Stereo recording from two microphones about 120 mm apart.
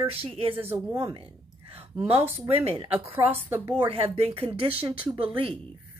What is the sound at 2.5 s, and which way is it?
A woman's voice, 55° right (ahead or behind).